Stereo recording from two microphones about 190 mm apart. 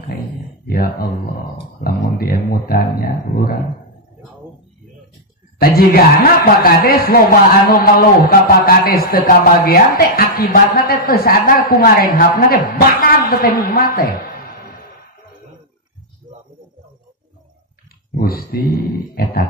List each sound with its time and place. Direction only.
0.7 s speech: 50° left (ahead or behind)
5.6 s speech: 50° left (ahead or behind)
18.1 s speech: 50° left (ahead or behind)